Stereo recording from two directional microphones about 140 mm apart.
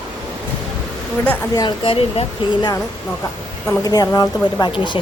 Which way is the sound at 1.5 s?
35° left (ahead or behind).